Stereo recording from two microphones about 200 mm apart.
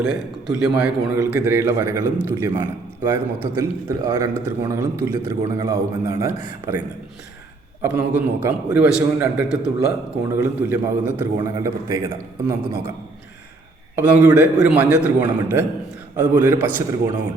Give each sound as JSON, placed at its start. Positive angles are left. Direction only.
{"t": 0.0, "sound": "a man's voice", "side_deg": 0}
{"t": 1.1, "sound": "a man's voice", "side_deg": -15}
{"t": 13.9, "sound": "a man's voice", "side_deg": -10}